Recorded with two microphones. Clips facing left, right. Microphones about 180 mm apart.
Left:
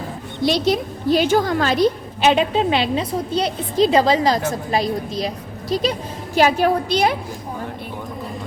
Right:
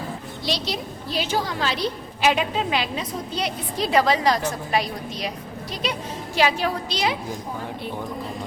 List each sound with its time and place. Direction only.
0.4 s a woman's voice: 50° left (ahead or behind)
2.2 s a woman's voice: 30° left (ahead or behind)
5.7 s a woman's voice: 35° left (ahead or behind); by 7.2 s 55° left (ahead or behind)